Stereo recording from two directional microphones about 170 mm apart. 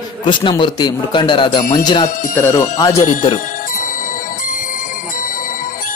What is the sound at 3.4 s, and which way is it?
Music, 55° left (ahead or behind).